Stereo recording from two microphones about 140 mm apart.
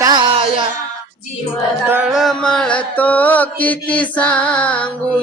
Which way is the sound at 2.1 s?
Centre (ahead or behind).